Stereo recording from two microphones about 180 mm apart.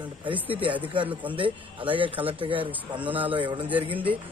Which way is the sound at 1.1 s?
10° right (ahead or behind).